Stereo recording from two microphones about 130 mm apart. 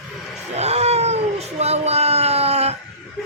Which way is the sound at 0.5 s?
55° right (ahead or behind).